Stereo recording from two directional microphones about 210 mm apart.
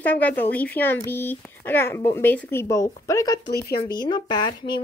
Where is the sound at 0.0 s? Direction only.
10° left (ahead or behind).